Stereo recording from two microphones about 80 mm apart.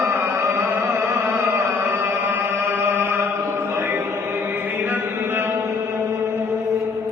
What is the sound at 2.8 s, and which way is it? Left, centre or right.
Chant, right.